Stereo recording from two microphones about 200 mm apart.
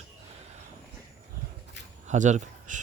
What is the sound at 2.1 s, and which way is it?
Speech, 35° right (ahead or behind).